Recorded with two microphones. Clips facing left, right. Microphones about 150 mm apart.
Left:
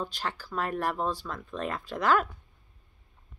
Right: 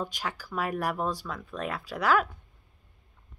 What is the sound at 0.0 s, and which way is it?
Speech, 10° right (ahead or behind).